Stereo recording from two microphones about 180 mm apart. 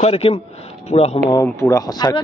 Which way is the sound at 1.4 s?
15° left (ahead or behind).